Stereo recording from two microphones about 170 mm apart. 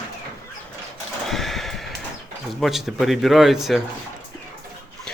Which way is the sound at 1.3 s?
Centre (ahead or behind).